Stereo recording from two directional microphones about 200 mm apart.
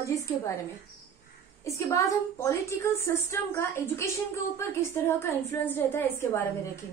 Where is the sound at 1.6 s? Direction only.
15° left (ahead or behind).